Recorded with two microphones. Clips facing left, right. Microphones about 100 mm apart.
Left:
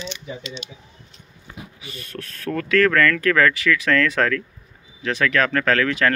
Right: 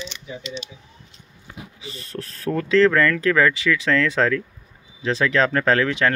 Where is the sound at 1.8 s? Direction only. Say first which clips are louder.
Right 3 dB; 30° right (ahead or behind).